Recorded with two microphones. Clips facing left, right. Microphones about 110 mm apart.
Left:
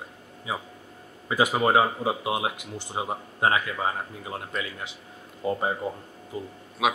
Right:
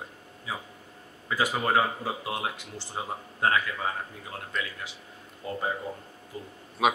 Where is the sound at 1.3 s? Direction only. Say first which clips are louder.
Left 4 dB; 20° left (ahead or behind).